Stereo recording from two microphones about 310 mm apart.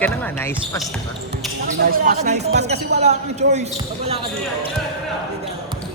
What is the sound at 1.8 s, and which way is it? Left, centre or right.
Speech, right.